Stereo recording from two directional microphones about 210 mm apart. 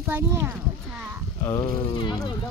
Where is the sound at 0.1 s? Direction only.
15° right (ahead or behind).